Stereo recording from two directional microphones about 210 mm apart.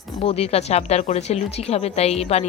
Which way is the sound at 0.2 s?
25° left (ahead or behind).